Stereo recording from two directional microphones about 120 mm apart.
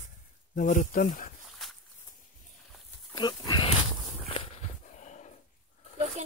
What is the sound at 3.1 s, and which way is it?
Pig, 35° left (ahead or behind).